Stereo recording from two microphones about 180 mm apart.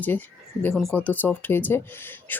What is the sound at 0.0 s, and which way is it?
Speech, 10° left (ahead or behind).